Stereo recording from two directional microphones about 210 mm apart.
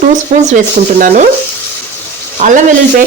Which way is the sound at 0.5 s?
40° right (ahead or behind).